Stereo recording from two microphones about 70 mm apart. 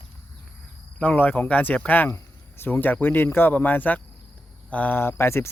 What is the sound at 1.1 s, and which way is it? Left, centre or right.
Speech, left.